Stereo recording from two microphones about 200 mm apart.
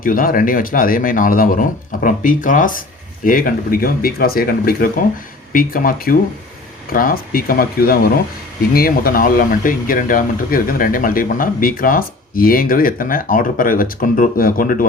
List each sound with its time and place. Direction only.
0.0 s speech: 45° left (ahead or behind)